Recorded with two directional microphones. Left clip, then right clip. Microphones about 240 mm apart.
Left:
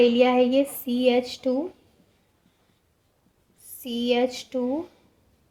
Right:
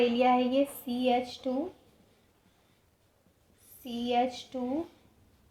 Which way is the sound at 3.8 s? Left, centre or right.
Left.